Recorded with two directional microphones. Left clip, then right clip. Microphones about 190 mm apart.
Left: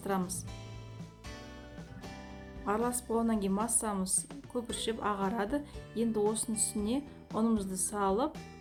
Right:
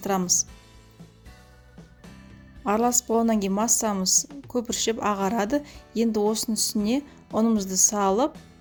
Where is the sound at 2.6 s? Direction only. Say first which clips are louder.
Right 10 dB; 45° right (ahead or behind).